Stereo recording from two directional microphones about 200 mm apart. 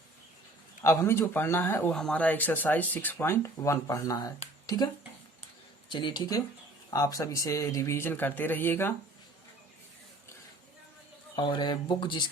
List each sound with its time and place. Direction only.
0.8 s speech: 10° left (ahead or behind)
5.9 s speech: 25° left (ahead or behind)
11.3 s speech: 25° left (ahead or behind)